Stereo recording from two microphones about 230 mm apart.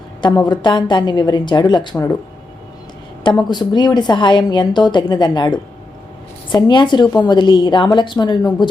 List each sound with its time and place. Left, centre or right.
0.2 s a woman's voice: centre
3.2 s a woman's voice: centre